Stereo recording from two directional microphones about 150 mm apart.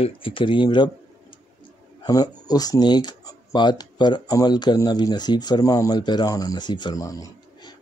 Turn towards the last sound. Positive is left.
turn(degrees=25)  # may be behind; listen again after turning